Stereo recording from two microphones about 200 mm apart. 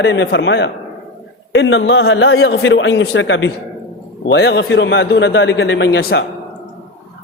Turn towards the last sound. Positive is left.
turn(degrees=60)  # may be behind; listen again after turning